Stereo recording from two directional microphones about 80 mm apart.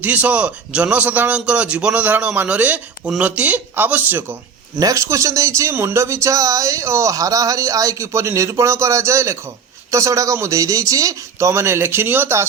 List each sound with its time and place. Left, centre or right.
0.0 s speech: centre
4.8 s speech: right